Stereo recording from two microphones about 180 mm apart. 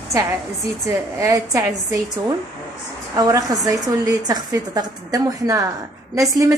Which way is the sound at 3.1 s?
20° right (ahead or behind).